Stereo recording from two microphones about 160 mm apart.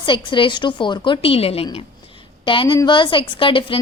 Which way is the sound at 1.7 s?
35° left (ahead or behind).